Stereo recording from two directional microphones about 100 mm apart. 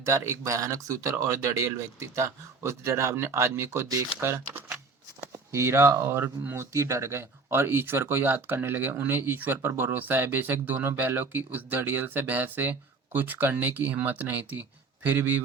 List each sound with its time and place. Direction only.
0.0 s speech: 30° right (ahead or behind)
5.5 s speech: 30° right (ahead or behind)